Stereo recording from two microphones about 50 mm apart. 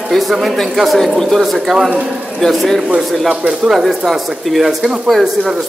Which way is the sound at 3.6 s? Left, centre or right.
Centre.